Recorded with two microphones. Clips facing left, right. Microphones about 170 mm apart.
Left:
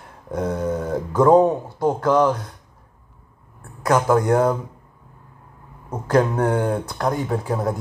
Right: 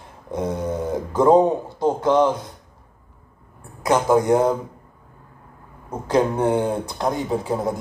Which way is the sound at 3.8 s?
20° right (ahead or behind).